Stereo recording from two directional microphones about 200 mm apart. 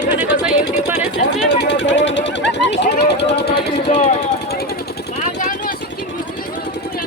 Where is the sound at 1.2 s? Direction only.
40° left (ahead or behind).